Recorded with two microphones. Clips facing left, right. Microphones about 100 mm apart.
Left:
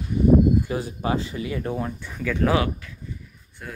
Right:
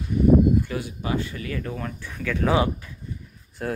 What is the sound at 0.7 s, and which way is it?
Speech, 30° left (ahead or behind).